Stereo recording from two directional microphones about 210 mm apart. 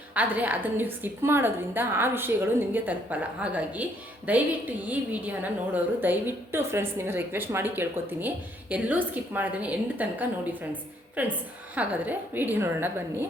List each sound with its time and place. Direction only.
0.1 s a woman's voice: 5° right (ahead or behind)